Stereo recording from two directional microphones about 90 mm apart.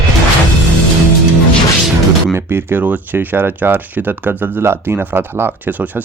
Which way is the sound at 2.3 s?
25° right (ahead or behind).